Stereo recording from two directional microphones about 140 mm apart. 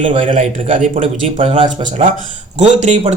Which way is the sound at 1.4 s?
45° right (ahead or behind).